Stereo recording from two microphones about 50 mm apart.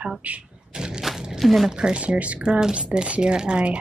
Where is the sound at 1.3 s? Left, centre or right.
Centre.